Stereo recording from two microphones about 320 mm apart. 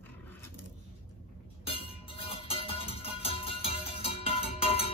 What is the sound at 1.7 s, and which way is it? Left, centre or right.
Music, centre.